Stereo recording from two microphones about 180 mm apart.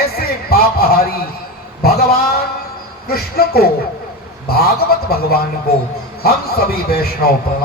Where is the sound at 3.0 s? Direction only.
60° left (ahead or behind).